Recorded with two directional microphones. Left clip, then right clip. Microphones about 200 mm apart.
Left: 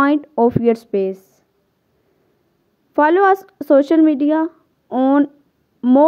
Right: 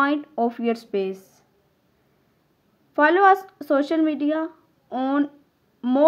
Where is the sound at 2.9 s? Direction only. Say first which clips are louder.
Left 3 dB; 50° left (ahead or behind).